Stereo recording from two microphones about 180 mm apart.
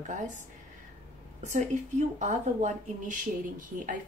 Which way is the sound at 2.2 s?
40° right (ahead or behind).